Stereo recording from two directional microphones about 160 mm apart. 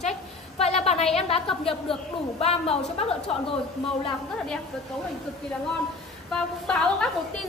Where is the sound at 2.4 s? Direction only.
40° left (ahead or behind).